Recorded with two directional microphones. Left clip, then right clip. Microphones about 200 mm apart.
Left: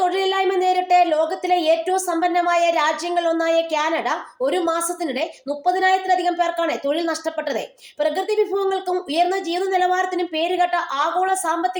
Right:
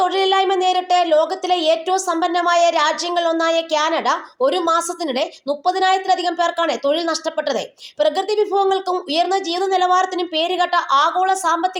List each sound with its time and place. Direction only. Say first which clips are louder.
0.0 s speech: right 3 dB; 20° right (ahead or behind)